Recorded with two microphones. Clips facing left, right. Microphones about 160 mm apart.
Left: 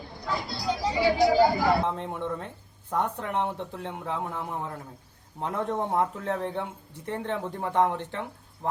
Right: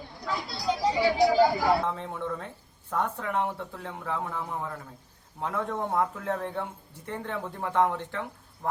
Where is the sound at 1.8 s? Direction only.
15° left (ahead or behind).